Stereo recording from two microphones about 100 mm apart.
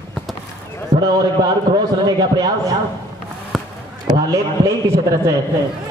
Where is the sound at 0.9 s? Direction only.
45° right (ahead or behind).